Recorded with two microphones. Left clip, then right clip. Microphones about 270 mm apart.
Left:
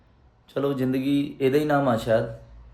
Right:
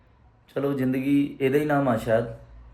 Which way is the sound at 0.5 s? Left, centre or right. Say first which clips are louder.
Left 1 dB; centre.